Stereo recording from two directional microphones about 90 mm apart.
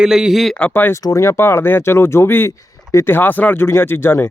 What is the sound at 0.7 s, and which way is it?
Speech, 25° left (ahead or behind).